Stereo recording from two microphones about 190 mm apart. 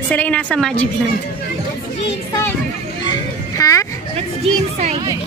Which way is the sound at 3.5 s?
15° left (ahead or behind).